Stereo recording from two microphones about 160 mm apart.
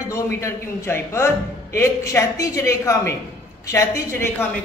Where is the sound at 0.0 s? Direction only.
20° left (ahead or behind).